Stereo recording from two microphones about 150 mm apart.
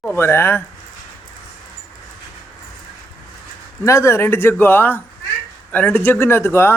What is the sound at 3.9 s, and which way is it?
A man's voice, 20° left (ahead or behind).